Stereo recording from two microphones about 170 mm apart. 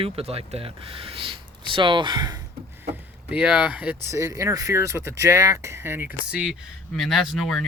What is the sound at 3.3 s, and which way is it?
Speech, 10° right (ahead or behind).